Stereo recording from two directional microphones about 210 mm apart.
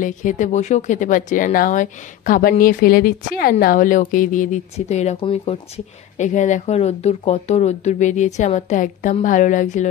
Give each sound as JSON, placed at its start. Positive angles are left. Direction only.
{"t": 0.0, "sound": "speech", "side_deg": 40}